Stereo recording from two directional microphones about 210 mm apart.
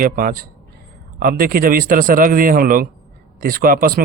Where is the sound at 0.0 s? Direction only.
45° right (ahead or behind).